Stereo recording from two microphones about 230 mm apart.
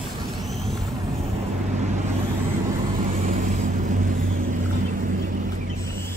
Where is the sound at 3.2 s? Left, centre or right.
Right.